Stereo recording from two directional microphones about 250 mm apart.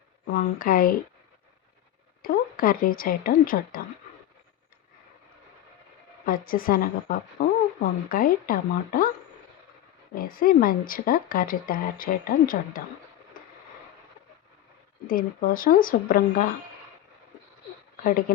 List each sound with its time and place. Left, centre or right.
0.3 s speech: left
2.2 s speech: left
6.2 s speech: left
10.2 s speech: left
15.0 s speech: left
18.0 s speech: left